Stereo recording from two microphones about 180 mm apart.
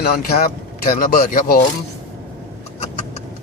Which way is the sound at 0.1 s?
55° left (ahead or behind).